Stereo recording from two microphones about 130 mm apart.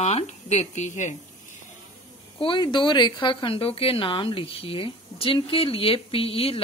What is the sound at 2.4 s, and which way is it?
A woman's voice, 40° left (ahead or behind).